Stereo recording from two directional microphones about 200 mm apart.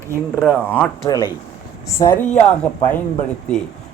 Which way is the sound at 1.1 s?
20° left (ahead or behind).